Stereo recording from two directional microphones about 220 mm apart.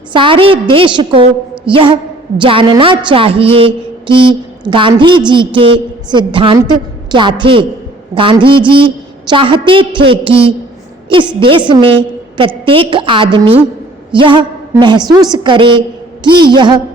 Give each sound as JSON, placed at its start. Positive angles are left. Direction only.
{"t": 0.1, "sound": "a woman's voice", "side_deg": -25}